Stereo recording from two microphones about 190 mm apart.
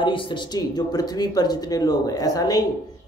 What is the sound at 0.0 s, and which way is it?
Speech, 25° left (ahead or behind).